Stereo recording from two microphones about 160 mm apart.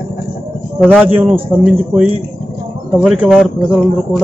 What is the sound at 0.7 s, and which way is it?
Speech, 5° right (ahead or behind).